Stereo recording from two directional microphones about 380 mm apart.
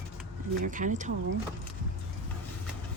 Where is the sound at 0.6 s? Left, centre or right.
Centre.